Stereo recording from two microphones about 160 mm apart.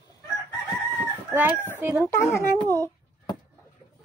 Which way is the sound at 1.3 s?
10° right (ahead or behind).